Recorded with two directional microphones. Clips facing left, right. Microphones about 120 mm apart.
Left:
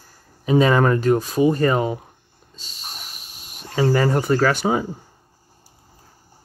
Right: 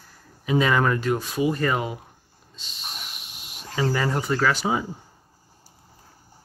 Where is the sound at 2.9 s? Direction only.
40° left (ahead or behind).